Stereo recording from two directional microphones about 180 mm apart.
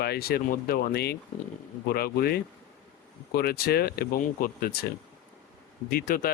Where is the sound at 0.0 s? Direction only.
60° left (ahead or behind).